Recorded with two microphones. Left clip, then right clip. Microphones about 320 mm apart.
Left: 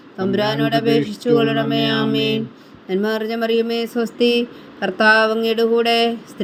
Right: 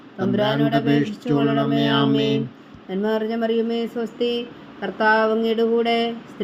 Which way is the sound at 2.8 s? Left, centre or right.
Left.